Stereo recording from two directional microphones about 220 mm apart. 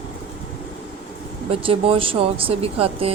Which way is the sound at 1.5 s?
25° right (ahead or behind).